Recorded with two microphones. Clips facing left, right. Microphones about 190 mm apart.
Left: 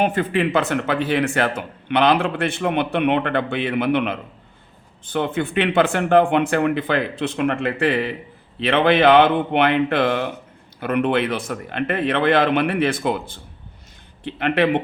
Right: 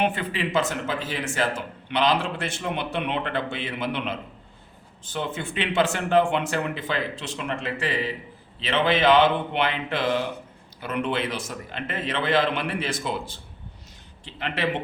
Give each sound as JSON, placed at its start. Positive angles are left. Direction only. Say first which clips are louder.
{"t": 0.0, "sound": "speech", "louder": "left 6 dB", "side_deg": 45}